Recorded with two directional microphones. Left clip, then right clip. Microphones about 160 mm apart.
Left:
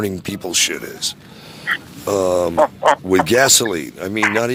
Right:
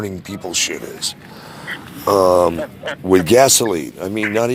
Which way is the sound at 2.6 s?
35° left (ahead or behind).